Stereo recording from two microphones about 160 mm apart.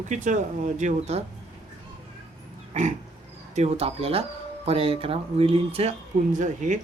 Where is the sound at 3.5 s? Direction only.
40° right (ahead or behind).